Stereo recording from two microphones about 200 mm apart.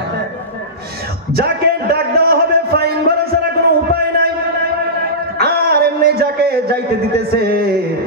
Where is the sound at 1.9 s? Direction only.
50° right (ahead or behind).